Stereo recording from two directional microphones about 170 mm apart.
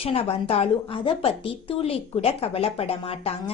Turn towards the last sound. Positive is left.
turn(degrees=35)  # may be behind; listen again after turning